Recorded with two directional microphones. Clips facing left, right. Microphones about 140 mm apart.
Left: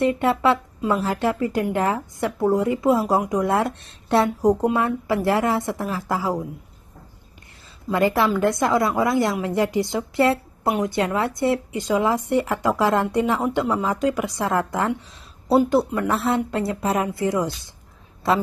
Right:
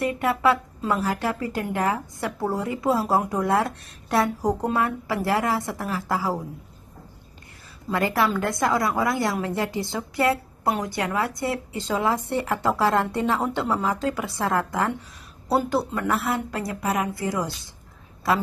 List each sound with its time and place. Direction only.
0.0 s a woman's voice: 25° left (ahead or behind)
7.9 s a woman's voice: 20° left (ahead or behind)